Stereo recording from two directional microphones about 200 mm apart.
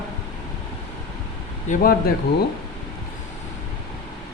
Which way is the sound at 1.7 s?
50° left (ahead or behind).